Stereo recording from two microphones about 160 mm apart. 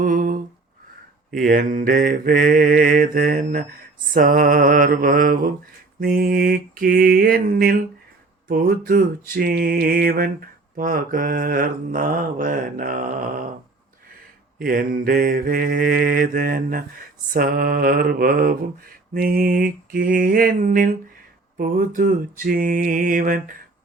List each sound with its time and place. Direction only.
0.0 s a sound: 55° right (ahead or behind)
1.5 s mantra: 60° right (ahead or behind)
14.6 s mantra: 65° right (ahead or behind)